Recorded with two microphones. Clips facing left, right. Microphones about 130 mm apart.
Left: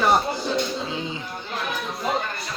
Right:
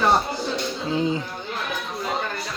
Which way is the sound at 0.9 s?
40° right (ahead or behind).